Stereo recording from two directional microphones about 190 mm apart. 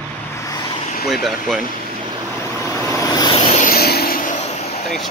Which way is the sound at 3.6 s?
55° left (ahead or behind).